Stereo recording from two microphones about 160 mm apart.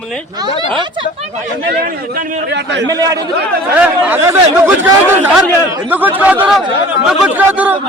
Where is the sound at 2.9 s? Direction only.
20° right (ahead or behind).